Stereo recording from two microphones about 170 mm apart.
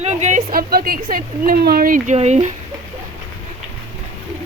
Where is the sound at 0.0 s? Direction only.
40° right (ahead or behind).